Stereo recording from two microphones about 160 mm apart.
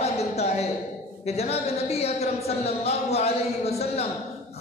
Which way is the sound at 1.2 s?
40° left (ahead or behind).